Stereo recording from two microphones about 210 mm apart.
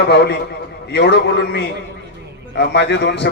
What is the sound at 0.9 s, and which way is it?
A man's voice, 50° left (ahead or behind).